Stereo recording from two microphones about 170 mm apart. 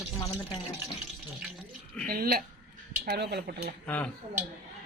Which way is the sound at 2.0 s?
60° right (ahead or behind).